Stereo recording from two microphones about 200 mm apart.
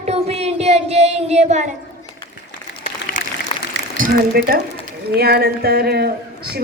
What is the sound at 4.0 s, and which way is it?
A woman's voice, 50° right (ahead or behind).